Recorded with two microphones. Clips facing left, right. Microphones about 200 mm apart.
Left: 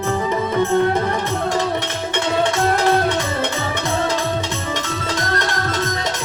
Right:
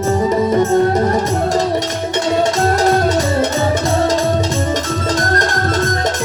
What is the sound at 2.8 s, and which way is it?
Music, 40° right (ahead or behind).